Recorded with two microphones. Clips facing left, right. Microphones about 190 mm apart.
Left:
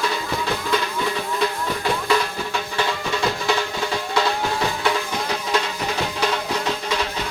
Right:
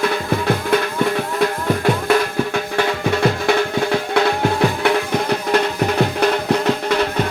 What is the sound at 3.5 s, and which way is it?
Music, 60° right (ahead or behind).